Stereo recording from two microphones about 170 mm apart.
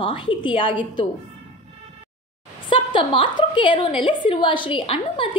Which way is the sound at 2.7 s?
30° left (ahead or behind).